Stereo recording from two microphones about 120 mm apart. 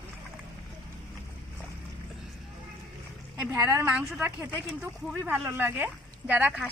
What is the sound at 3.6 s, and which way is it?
Speech, 20° right (ahead or behind).